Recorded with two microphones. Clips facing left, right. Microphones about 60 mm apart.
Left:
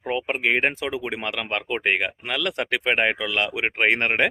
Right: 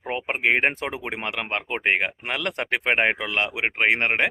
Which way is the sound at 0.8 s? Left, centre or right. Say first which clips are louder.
Left 2 dB; right.